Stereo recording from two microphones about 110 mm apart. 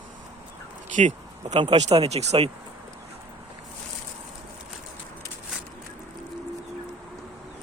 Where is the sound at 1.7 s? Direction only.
70° right (ahead or behind).